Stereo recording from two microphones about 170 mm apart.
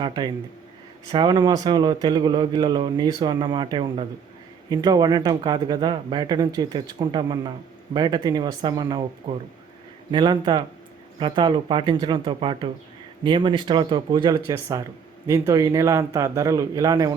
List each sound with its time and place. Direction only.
0.0 s speech: 25° right (ahead or behind)